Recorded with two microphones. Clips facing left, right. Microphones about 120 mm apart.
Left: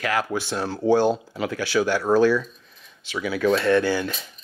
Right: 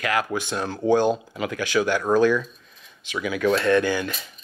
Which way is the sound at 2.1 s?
10° left (ahead or behind).